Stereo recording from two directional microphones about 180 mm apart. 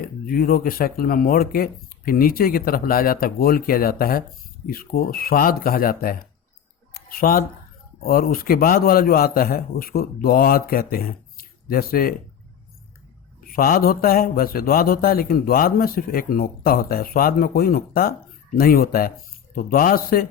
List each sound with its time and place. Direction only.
0.3 s a man's voice: 55° left (ahead or behind)
6.9 s a sound: 55° left (ahead or behind)
8.0 s a man's voice: 55° left (ahead or behind)
13.5 s a man's voice: 55° left (ahead or behind)